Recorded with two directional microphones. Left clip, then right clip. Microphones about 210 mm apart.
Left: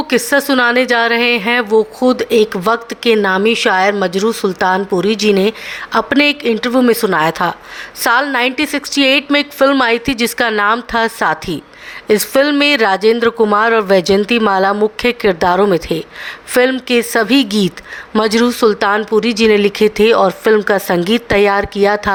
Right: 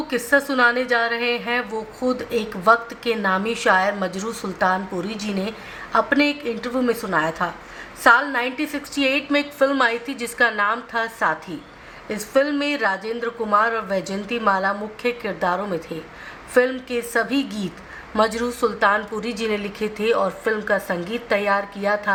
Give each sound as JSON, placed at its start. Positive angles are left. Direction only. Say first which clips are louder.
{"t": 0.1, "sound": "a woman's voice", "louder": "left 7 dB", "side_deg": 45}